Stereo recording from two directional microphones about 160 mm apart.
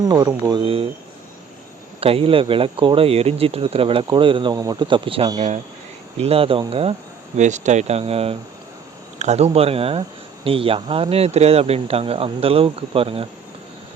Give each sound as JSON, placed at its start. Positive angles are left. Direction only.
{"t": 0.0, "sound": "speech", "side_deg": -25}
{"t": 2.0, "sound": "speech", "side_deg": -35}
{"t": 7.3, "sound": "speech", "side_deg": -50}